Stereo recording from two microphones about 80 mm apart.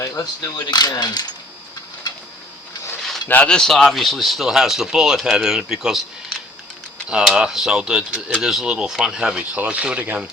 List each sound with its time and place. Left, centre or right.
0.0 s speech: left
3.2 s speech: left
3.5 s speech: centre